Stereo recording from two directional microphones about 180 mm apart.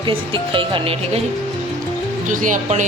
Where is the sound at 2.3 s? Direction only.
45° right (ahead or behind).